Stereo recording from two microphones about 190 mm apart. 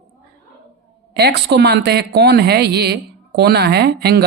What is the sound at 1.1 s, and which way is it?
Speech, 60° right (ahead or behind).